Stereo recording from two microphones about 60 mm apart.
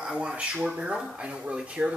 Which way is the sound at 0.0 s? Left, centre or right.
Centre.